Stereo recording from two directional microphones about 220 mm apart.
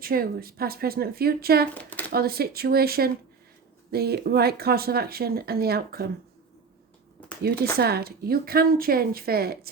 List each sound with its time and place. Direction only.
0.0 s speech: 40° right (ahead or behind)
1.7 s a sound: 5° left (ahead or behind)
2.1 s speech: 45° right (ahead or behind)
7.4 s speech: 45° right (ahead or behind)